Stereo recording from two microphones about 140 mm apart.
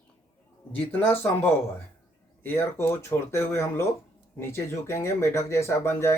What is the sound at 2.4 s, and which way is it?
Speech, 15° left (ahead or behind).